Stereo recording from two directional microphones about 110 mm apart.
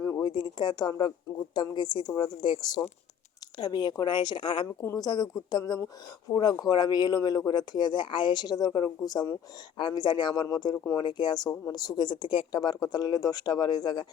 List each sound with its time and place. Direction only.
0.0 s speech: 35° left (ahead or behind)
4.8 s speech: 30° left (ahead or behind)